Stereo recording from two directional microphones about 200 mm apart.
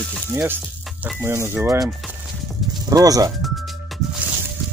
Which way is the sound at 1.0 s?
10° right (ahead or behind).